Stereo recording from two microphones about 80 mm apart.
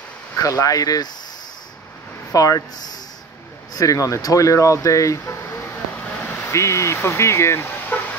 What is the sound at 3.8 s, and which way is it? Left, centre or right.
Speech, left.